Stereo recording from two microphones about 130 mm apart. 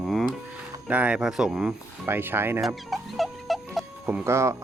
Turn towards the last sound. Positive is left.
turn(degrees=-20)  # may be behind; listen again after turning